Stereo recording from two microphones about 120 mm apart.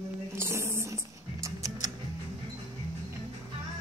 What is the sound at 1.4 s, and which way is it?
Music, 25° right (ahead or behind).